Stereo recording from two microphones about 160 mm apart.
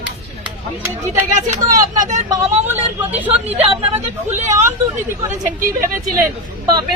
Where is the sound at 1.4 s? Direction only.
55° right (ahead or behind).